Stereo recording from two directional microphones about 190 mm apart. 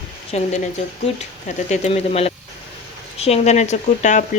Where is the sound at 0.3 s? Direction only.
35° left (ahead or behind).